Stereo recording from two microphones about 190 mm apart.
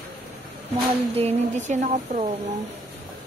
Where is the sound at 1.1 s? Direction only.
35° right (ahead or behind).